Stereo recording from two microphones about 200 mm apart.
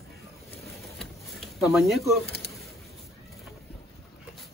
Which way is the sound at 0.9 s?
Centre (ahead or behind).